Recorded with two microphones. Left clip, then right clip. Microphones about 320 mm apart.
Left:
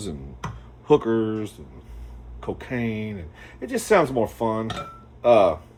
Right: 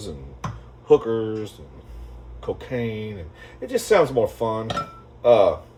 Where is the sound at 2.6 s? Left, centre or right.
Centre.